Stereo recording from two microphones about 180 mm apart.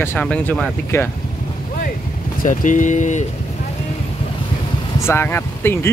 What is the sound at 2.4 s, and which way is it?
Speech, 45° left (ahead or behind).